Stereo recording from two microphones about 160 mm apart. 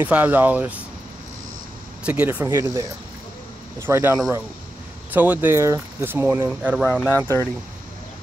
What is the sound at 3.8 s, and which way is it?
Speech, 15° right (ahead or behind).